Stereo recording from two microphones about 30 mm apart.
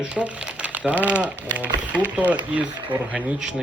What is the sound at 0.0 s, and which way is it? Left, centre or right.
Speech, right.